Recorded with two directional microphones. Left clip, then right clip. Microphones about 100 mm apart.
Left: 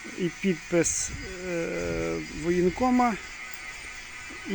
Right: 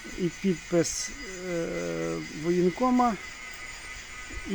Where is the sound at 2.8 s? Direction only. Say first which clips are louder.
Even; 5° right (ahead or behind).